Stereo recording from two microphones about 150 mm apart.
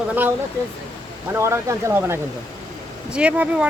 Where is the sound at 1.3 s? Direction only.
20° right (ahead or behind).